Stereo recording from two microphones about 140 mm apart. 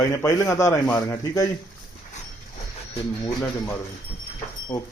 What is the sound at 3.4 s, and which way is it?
Speech, 20° left (ahead or behind).